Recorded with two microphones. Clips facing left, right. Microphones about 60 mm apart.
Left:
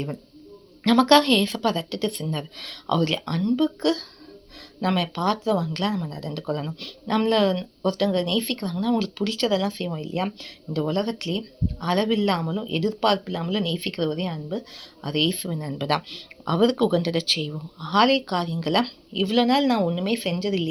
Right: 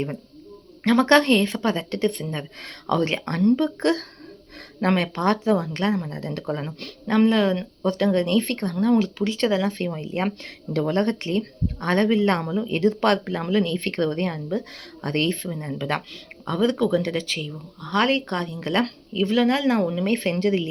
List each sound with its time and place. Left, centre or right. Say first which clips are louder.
0.9 s speech: even; right
7.1 s speech: right 2 dB; right
9.4 s speech: right 1 dB; right
15.4 s speech: even; right